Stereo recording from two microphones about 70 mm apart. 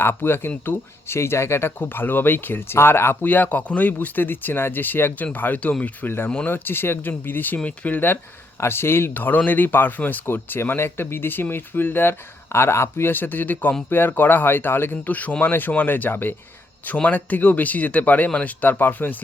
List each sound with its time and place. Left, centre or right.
0.0 s speech: left